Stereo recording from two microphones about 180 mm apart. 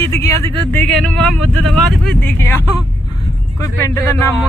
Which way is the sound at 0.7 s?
5° left (ahead or behind).